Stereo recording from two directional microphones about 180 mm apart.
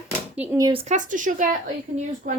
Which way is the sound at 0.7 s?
40° right (ahead or behind).